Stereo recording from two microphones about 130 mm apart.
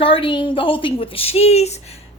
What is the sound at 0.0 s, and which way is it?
A woman's voice, 45° left (ahead or behind).